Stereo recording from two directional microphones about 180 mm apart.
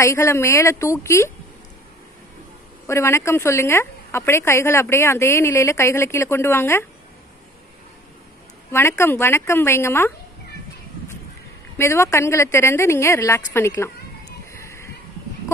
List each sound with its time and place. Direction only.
0.0 s a woman's voice: 15° left (ahead or behind)
2.9 s a woman's voice: 15° left (ahead or behind)
8.7 s a woman's voice: 15° left (ahead or behind)
11.7 s a woman's voice: 15° left (ahead or behind)
14.5 s a sound: 15° left (ahead or behind)